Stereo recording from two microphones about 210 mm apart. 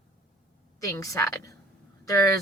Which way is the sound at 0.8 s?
15° left (ahead or behind).